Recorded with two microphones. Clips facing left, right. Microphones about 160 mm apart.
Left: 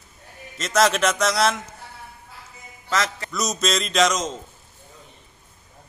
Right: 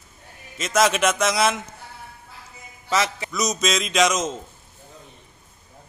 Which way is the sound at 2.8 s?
10° right (ahead or behind).